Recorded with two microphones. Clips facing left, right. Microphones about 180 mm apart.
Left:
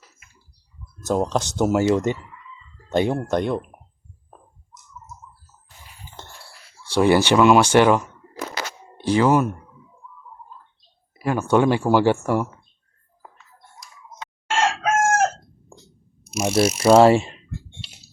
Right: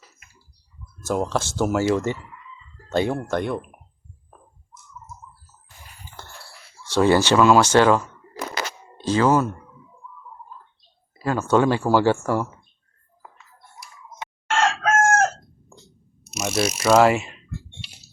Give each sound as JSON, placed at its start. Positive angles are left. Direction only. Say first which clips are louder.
{"t": 1.0, "sound": "speech", "louder": "left 2 dB", "side_deg": 20}
{"t": 6.2, "sound": "a sound", "louder": "left 1 dB", "side_deg": 20}
{"t": 6.9, "sound": "speech", "louder": "left 1 dB", "side_deg": 15}
{"t": 11.2, "sound": "speech", "louder": "left 1 dB", "side_deg": 15}
{"t": 14.5, "sound": "chicken", "louder": "even", "side_deg": 15}
{"t": 15.7, "sound": "a sound", "louder": "left 2 dB", "side_deg": 30}
{"t": 16.2, "sound": "ratchet", "louder": "left 5 dB", "side_deg": 10}
{"t": 16.7, "sound": "speech", "louder": "left 3 dB", "side_deg": 30}